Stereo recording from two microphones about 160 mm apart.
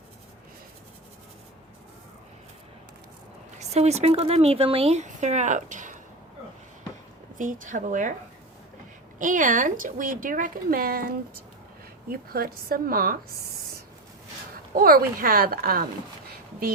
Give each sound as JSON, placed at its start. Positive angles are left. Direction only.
{"t": 3.6, "sound": "speech", "side_deg": -45}
{"t": 7.3, "sound": "speech", "side_deg": -55}
{"t": 9.1, "sound": "speech", "side_deg": -55}
{"t": 12.3, "sound": "a woman's voice", "side_deg": -70}
{"t": 14.8, "sound": "a woman's voice", "side_deg": -65}